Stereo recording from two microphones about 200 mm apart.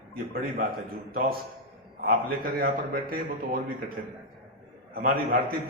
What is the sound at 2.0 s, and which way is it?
A man's voice, 50° right (ahead or behind).